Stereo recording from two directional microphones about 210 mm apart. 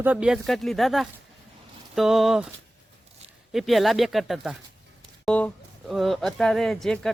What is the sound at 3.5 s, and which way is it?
Speech, centre (ahead or behind).